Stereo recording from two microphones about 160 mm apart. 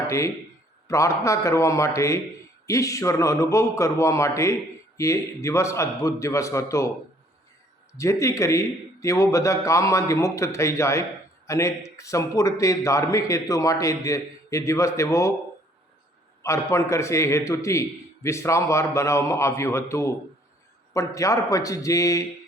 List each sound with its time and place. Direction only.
0.9 s a man's voice: 20° left (ahead or behind)
7.9 s a man's voice: 20° left (ahead or behind)
16.4 s a man's voice: 20° left (ahead or behind)